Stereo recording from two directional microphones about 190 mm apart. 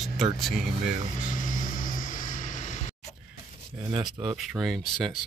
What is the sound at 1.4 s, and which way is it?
Vehicle, 45° left (ahead or behind).